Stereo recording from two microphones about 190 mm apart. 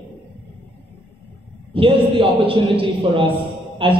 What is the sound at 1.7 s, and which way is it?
A man's voice, 30° right (ahead or behind).